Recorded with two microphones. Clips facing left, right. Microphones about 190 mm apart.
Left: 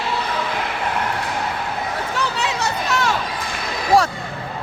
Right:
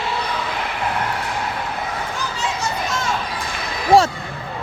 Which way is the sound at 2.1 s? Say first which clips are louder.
Left 2 dB; 70° left (ahead or behind).